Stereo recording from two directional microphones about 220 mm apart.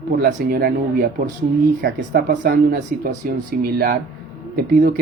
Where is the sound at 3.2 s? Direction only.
40° right (ahead or behind).